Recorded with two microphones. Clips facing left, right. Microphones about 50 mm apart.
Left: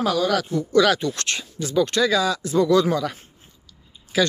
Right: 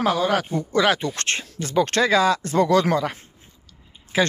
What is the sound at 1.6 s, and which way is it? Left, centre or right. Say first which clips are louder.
Speech: even; right.